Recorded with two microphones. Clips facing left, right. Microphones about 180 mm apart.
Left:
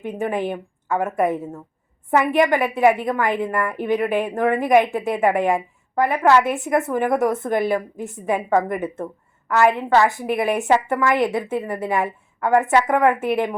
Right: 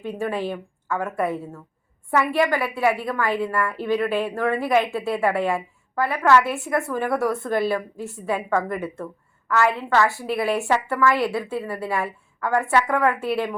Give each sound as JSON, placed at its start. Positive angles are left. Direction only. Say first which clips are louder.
{"t": 0.0, "sound": "a woman's voice", "louder": "left 2 dB", "side_deg": 20}